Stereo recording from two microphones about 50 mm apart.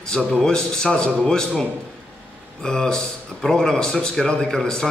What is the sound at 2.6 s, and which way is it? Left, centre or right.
Speech, centre.